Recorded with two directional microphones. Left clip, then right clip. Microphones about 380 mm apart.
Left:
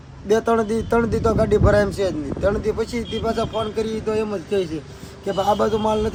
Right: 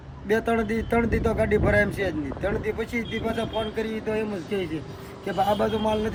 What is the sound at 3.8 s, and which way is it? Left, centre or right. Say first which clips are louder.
A man's voice: left 5 dB; centre.